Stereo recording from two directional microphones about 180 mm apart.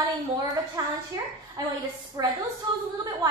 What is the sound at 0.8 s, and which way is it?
Speech, 20° right (ahead or behind).